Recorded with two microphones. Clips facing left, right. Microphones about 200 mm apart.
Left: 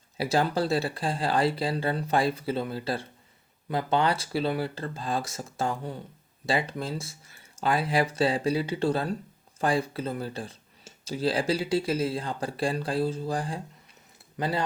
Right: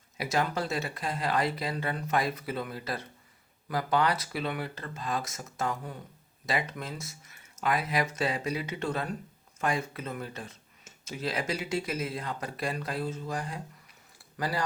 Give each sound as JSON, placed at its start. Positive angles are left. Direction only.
{"t": 0.2, "sound": "speech", "side_deg": 30}